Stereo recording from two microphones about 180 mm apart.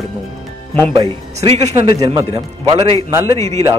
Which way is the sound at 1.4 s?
35° right (ahead or behind).